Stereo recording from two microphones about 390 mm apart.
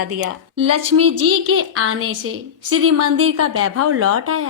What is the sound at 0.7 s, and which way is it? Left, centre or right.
A woman's voice, right.